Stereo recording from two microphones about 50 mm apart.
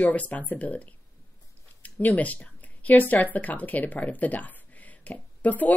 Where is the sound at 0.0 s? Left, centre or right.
Left.